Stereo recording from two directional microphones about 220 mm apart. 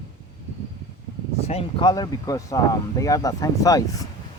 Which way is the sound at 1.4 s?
25° left (ahead or behind).